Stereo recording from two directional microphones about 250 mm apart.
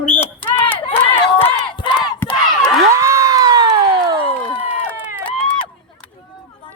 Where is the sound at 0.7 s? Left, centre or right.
Left.